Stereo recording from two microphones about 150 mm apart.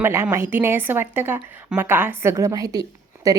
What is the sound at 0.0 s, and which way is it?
A woman's voice, 15° right (ahead or behind).